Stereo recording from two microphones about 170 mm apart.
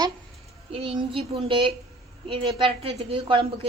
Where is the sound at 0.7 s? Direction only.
35° right (ahead or behind).